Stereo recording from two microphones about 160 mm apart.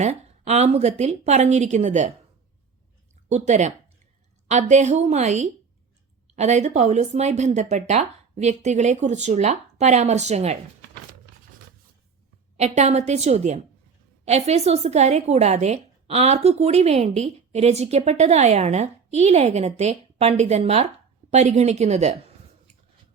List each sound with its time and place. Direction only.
0.0 s a woman's voice: 40° right (ahead or behind)
3.2 s a woman's voice: 45° right (ahead or behind)
12.5 s a woman's voice: 45° right (ahead or behind)